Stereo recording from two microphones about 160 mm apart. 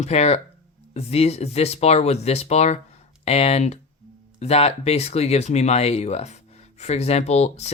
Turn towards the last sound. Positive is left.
turn(degrees=40)  # may be behind; listen again after turning